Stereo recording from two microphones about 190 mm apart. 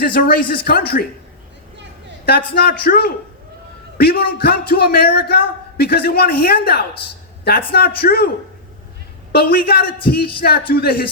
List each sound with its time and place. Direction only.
0.0 s speech: 50° left (ahead or behind)
2.2 s a man's voice: 55° left (ahead or behind)
9.3 s a man's voice: 55° left (ahead or behind)